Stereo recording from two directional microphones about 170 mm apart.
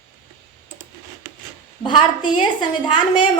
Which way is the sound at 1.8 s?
30° left (ahead or behind).